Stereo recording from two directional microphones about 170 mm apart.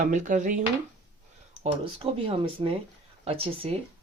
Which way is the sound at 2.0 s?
30° right (ahead or behind).